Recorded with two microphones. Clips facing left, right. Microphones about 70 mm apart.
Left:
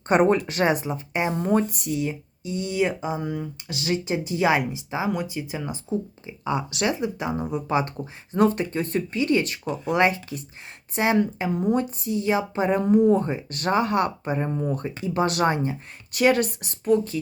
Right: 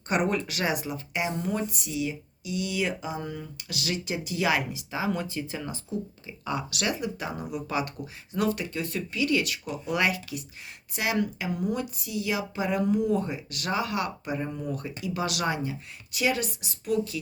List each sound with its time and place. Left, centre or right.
0.1 s speech: left
1.5 s speech: left
16.1 s speech: left